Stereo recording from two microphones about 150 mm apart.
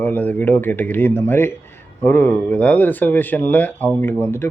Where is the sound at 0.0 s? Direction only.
10° left (ahead or behind).